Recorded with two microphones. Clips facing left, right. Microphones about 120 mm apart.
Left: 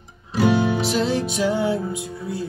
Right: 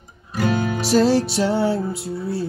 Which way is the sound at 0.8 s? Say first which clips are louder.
Right 5 dB; 40° right (ahead or behind).